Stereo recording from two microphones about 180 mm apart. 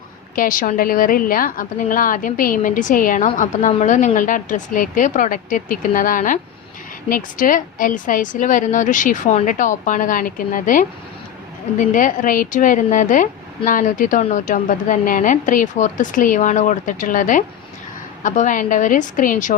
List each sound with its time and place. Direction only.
0.3 s a woman's voice: 50° left (ahead or behind)